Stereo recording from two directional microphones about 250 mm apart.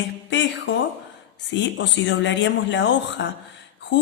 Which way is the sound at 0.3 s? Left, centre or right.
Left.